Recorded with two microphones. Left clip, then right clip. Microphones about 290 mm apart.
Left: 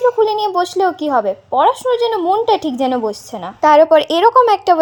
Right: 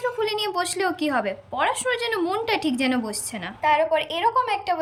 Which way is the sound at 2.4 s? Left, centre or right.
Right.